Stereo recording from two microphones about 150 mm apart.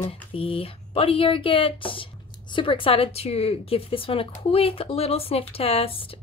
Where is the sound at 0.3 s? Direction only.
35° left (ahead or behind).